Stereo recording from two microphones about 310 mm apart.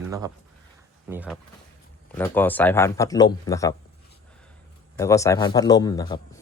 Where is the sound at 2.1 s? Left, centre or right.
Centre.